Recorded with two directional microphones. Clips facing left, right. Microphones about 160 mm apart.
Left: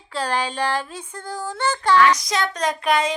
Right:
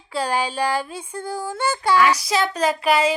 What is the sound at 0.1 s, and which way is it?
Speech, 10° right (ahead or behind).